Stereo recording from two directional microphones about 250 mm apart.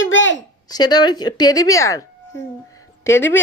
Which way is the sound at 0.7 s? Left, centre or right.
Centre.